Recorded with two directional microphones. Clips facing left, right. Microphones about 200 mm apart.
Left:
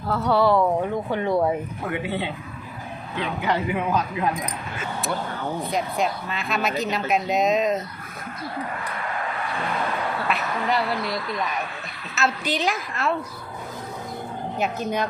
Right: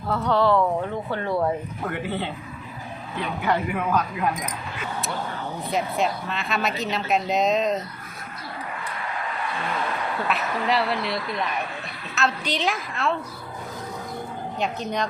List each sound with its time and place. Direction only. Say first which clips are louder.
0.1 s speech: left 1 dB; 5° left (ahead or behind)
3.4 s speech: even; 15° left (ahead or behind)
5.7 s a woman's voice: right 2 dB; centre (ahead or behind)
10.2 s a woman's voice: right 2 dB; centre (ahead or behind)
12.1 s a woman's voice: left 1 dB; 5° left (ahead or behind)
14.6 s speech: left 2 dB; 5° left (ahead or behind)